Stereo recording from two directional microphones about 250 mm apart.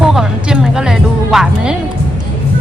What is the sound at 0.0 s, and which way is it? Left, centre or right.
Music, centre.